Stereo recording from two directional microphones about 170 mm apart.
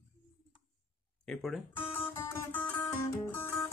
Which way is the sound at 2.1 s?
15° left (ahead or behind).